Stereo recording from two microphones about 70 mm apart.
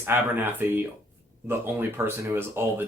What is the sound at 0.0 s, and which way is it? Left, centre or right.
Speech, right.